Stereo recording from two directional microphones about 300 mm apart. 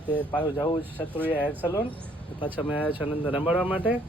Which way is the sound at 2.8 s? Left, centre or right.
Centre.